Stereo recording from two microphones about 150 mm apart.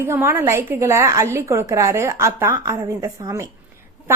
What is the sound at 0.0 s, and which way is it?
A woman's voice, 15° right (ahead or behind).